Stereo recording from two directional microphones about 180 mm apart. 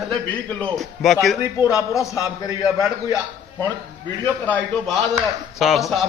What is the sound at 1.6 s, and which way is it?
Speech, 15° left (ahead or behind).